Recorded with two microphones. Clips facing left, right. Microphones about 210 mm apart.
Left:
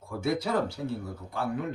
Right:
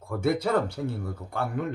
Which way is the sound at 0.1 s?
55° right (ahead or behind).